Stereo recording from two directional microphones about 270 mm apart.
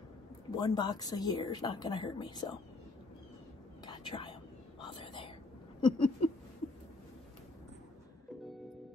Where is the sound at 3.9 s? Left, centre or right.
Centre.